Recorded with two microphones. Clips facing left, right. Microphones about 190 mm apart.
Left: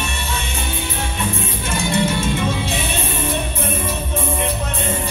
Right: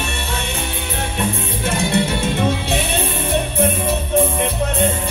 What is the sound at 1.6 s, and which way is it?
Music, 60° right (ahead or behind).